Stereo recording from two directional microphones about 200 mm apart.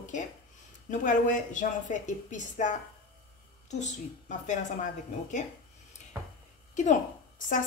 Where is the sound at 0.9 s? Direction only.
40° left (ahead or behind).